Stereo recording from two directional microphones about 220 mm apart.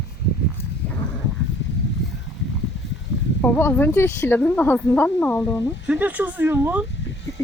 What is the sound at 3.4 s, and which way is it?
Speech, 10° left (ahead or behind).